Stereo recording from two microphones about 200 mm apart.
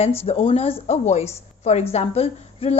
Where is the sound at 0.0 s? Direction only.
30° left (ahead or behind).